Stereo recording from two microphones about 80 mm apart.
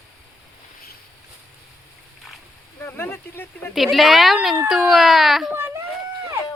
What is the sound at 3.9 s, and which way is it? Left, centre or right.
Speech, centre.